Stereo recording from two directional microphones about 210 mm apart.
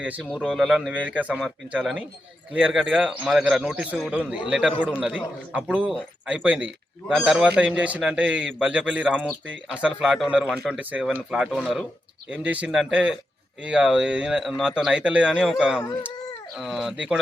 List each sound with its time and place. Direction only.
0.0 s a man's voice: 5° right (ahead or behind)